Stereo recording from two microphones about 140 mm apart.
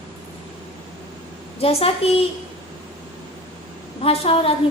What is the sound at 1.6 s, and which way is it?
Speech, 45° left (ahead or behind).